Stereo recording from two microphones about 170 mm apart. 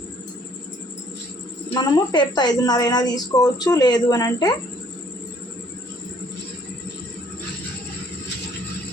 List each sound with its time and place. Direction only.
1.7 s a woman's voice: 25° left (ahead or behind)